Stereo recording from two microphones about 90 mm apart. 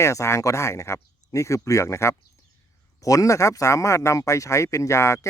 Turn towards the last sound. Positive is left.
turn(degrees=30)  # may be behind; listen again after turning